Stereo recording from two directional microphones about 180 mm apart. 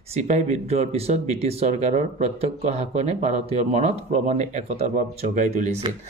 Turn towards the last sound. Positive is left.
turn(degrees=-40)  # may be behind; listen again after turning